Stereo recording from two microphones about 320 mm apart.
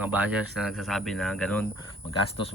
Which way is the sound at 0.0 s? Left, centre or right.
Centre.